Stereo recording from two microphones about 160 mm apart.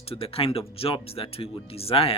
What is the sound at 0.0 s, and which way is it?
Speech, 35° left (ahead or behind).